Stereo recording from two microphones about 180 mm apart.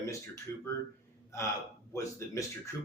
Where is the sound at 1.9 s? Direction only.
15° left (ahead or behind).